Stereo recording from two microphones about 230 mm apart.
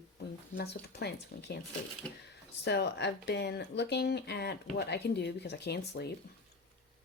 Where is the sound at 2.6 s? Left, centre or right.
Left.